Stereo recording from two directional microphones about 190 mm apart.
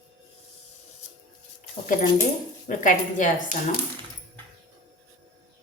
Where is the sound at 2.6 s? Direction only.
45° left (ahead or behind).